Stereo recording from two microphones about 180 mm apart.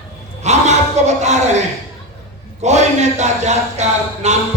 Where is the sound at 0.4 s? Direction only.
40° right (ahead or behind).